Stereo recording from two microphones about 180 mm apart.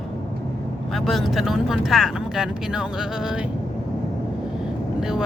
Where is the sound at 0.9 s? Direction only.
Centre (ahead or behind).